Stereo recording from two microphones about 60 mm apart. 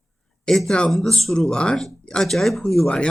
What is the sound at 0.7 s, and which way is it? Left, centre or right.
Speech, centre.